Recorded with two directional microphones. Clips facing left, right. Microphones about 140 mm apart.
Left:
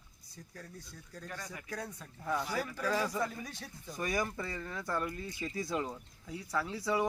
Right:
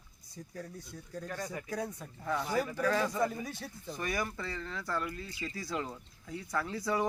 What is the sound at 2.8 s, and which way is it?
Speech, 10° left (ahead or behind).